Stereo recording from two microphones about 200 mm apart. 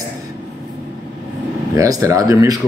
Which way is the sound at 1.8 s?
15° right (ahead or behind).